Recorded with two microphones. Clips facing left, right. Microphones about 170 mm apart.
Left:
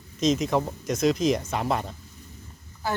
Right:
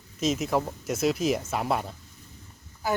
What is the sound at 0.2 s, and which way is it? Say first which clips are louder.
Speech: left 3 dB; 5° right (ahead or behind).